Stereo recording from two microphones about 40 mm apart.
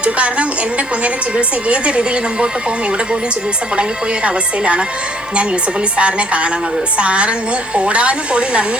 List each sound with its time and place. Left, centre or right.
0.0 s a woman's voice: right
3.8 s a woman's voice: right
6.0 s a woman's voice: right